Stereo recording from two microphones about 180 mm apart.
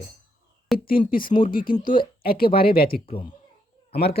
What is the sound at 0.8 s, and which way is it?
Speech, 55° left (ahead or behind).